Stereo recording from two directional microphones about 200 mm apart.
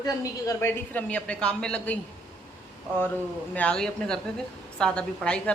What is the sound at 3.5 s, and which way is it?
A woman's voice, 5° left (ahead or behind).